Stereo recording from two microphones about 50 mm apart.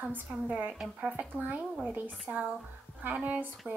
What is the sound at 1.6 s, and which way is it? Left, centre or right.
Speech, centre.